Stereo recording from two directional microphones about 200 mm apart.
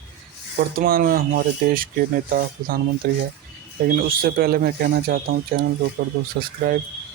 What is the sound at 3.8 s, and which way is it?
Speech, 45° right (ahead or behind).